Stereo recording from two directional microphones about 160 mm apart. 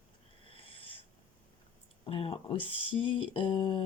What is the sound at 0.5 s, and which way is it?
Wheeze, 35° left (ahead or behind).